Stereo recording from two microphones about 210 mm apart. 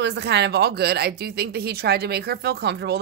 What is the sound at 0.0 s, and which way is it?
Speech, 55° right (ahead or behind).